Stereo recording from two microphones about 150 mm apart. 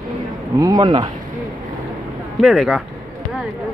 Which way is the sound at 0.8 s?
35° right (ahead or behind).